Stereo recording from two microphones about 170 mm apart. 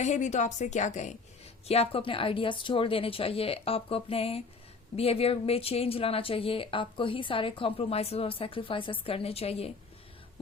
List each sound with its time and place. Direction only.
0.0 s a woman's voice: 45° left (ahead or behind)